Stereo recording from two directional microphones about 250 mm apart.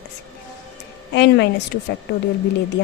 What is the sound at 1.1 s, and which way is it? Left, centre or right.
Speech, left.